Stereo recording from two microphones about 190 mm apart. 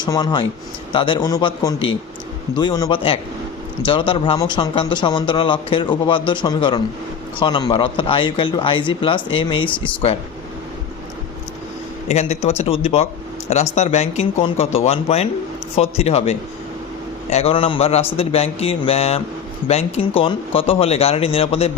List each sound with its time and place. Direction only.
0.0 s speech: 20° left (ahead or behind)
12.0 s speech: 35° left (ahead or behind)